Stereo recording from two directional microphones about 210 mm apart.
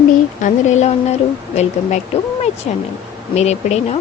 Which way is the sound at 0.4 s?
35° left (ahead or behind).